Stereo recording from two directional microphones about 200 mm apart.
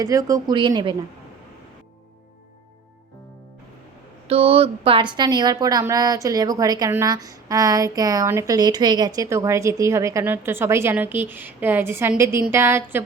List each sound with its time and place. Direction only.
0.0 s a woman's voice: 20° right (ahead or behind)
4.3 s a woman's voice: 30° right (ahead or behind); by 13.0 s 10° right (ahead or behind)